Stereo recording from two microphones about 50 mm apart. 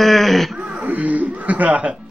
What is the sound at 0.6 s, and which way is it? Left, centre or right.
Music, right.